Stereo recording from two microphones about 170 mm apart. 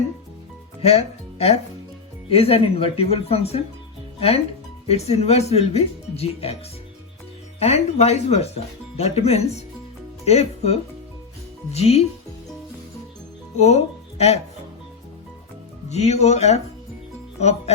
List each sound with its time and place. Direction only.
0.8 s speech: 40° left (ahead or behind)
4.9 s speech: 35° left (ahead or behind)
7.6 s speech: 40° left (ahead or behind)
13.6 s speech: 40° left (ahead or behind)
15.9 s speech: 40° left (ahead or behind)